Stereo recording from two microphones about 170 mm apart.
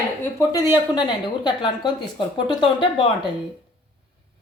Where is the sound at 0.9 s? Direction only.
25° left (ahead or behind).